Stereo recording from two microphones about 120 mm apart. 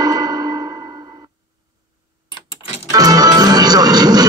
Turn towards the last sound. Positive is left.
turn(degrees=-35)  # may be behind; listen again after turning